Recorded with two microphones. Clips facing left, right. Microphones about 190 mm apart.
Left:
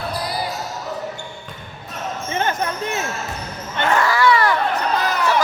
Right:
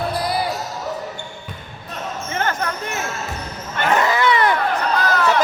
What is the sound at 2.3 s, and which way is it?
Basketball bounce, 20° left (ahead or behind).